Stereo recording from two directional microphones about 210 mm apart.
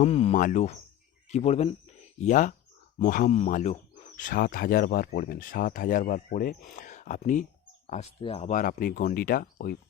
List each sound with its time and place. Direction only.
0.0 s speech: 30° left (ahead or behind); by 9.7 s 45° left (ahead or behind)